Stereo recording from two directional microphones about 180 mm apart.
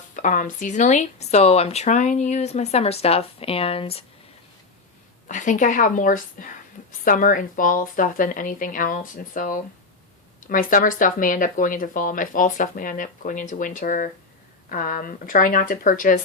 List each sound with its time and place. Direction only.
0.2 s speech: 45° left (ahead or behind)
5.3 s speech: 45° left (ahead or behind)